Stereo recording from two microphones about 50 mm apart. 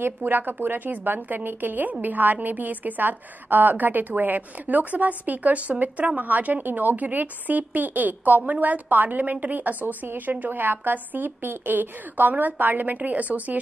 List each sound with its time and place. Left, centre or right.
0.2 s a woman's voice: right